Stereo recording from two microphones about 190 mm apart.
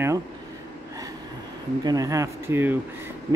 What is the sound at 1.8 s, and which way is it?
Speech, 20° right (ahead or behind).